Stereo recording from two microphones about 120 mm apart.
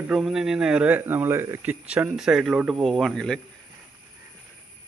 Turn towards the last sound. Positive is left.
turn(degrees=5)  # may be behind; listen again after turning